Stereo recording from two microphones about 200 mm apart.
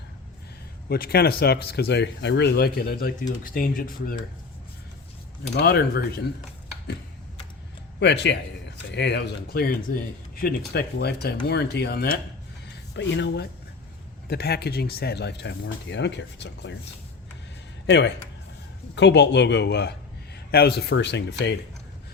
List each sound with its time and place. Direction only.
0.9 s speech: 50° left (ahead or behind)
5.5 s speech: 50° left (ahead or behind)
7.9 s speech: 60° left (ahead or behind)
17.8 s speech: 60° left (ahead or behind)